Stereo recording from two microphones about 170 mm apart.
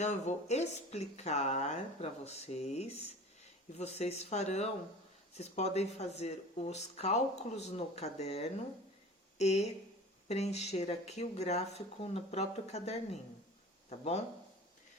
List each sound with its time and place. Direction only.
0.0 s speech: 45° left (ahead or behind)